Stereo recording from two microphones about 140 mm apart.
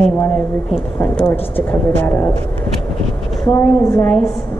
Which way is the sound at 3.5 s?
15° left (ahead or behind).